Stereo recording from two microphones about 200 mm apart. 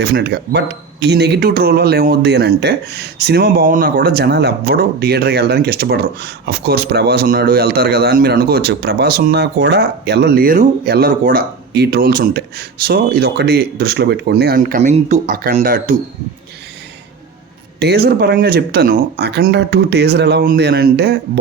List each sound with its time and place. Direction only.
0.0 s speech: 55° right (ahead or behind)
17.7 s speech: 55° right (ahead or behind)